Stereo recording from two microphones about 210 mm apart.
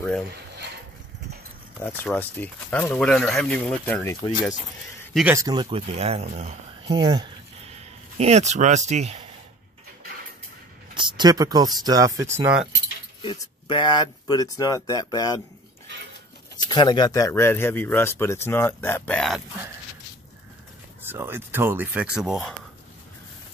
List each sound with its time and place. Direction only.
1.8 s speech: 10° left (ahead or behind)
5.1 s speech: 10° right (ahead or behind); by 6.5 s 30° right (ahead or behind)
6.9 s speech: 20° right (ahead or behind)
11.0 s speech: 20° right (ahead or behind)
13.2 s speech: 25° left (ahead or behind)
16.6 s speech: 20° left (ahead or behind); by 19.4 s centre (ahead or behind)
21.0 s speech: 10° right (ahead or behind)